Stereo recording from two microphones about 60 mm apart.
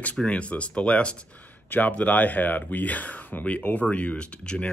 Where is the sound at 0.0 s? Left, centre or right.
Left.